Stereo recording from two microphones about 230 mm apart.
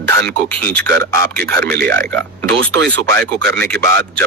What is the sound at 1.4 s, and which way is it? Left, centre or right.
Speech, right.